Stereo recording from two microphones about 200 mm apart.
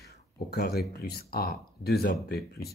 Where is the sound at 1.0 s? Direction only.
50° left (ahead or behind).